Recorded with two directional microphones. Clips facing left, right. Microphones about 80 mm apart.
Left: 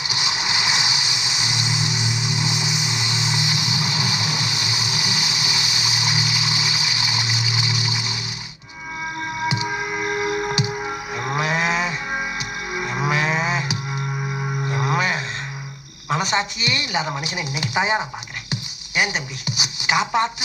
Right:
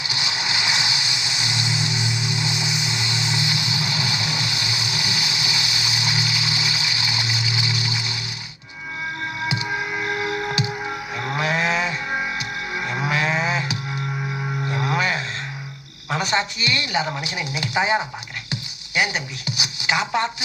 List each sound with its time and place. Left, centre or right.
0.1 s a sound: left
9.4 s music: left
12.7 s a sound: left
14.7 s music: left
16.0 s speech: left
19.6 s music: left